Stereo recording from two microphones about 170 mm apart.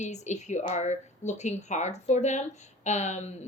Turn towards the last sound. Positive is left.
turn(degrees=45)  # may be behind; listen again after turning